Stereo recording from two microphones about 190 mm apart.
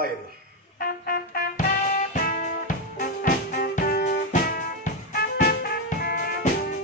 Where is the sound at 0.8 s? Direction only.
50° left (ahead or behind).